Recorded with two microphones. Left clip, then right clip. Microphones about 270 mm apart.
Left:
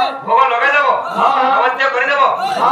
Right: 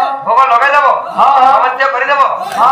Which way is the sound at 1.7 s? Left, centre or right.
Centre.